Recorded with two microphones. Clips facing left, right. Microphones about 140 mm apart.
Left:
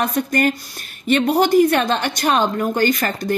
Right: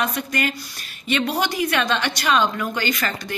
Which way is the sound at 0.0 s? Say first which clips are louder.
Left 6 dB; 45° left (ahead or behind).